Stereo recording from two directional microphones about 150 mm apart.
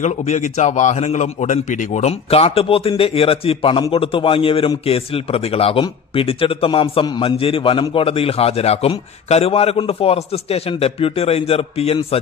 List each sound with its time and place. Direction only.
0.0 s a man's voice: 50° left (ahead or behind)